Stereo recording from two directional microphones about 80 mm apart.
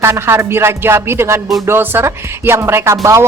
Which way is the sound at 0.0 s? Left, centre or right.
Right.